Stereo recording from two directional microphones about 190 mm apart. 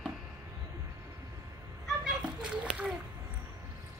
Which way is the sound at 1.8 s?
5° right (ahead or behind).